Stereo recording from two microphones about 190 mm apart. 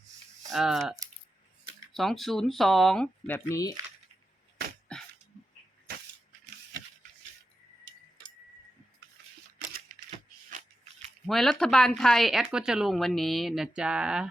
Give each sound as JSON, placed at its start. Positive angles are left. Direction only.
{"t": 0.5, "sound": "speech", "side_deg": 0}
{"t": 4.9, "sound": "dog", "side_deg": 5}
{"t": 9.9, "sound": "typewriter", "side_deg": -45}
{"t": 11.3, "sound": "speech", "side_deg": 0}